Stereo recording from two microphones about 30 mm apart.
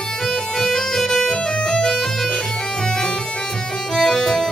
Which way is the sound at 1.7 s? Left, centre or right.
Centre.